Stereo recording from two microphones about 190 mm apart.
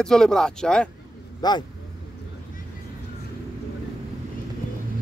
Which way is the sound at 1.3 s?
20° left (ahead or behind).